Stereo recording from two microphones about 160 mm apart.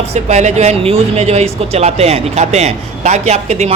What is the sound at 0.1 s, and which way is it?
Speech, 45° right (ahead or behind).